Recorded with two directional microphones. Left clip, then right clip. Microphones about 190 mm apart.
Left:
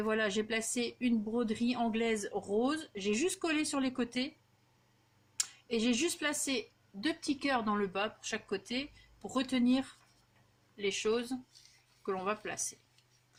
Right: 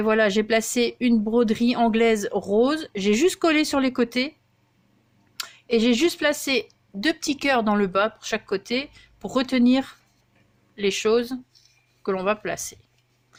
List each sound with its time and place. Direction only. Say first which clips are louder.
0.0 s speech: right 13 dB; 40° right (ahead or behind)
5.4 s speech: right 12 dB; 45° right (ahead or behind)